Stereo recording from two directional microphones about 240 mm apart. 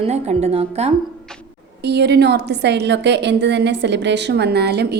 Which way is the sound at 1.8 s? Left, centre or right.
Right.